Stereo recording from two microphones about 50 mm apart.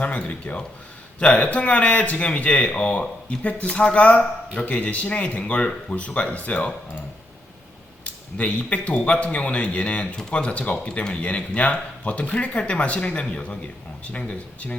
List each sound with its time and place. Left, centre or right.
0.0 s speech: left
8.0 s speech: left